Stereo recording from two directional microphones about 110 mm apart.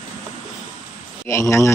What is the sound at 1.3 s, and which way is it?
Speech, 25° left (ahead or behind).